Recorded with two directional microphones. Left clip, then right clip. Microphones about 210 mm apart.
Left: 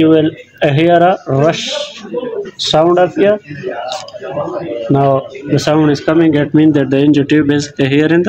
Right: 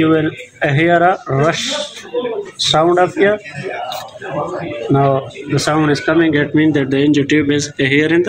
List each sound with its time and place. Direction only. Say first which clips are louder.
0.0 s speech: left 4 dB; 35° left (ahead or behind)
4.9 s speech: left 2 dB; 20° left (ahead or behind)
5.5 s speech: left 3 dB; 35° left (ahead or behind)